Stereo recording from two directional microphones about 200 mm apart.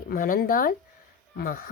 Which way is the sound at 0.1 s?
45° left (ahead or behind).